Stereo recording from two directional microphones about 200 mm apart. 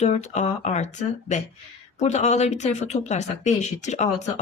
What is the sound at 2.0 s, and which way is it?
Speech, 35° left (ahead or behind).